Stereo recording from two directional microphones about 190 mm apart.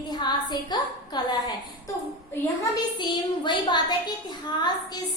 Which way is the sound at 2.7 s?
25° left (ahead or behind).